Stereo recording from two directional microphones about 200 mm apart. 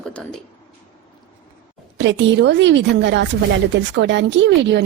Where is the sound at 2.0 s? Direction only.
65° right (ahead or behind).